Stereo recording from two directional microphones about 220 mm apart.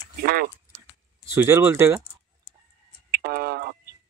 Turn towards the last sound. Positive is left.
turn(degrees=-45)  # may be behind; listen again after turning